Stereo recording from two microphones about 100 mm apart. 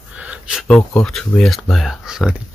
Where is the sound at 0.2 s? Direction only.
10° right (ahead or behind).